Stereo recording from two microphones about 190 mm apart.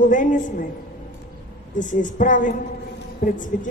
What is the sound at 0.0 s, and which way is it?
Speech, 45° left (ahead or behind).